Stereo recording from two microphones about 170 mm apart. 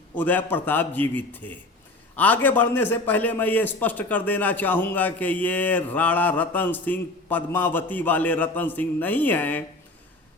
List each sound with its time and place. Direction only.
0.2 s a man's voice: 10° left (ahead or behind)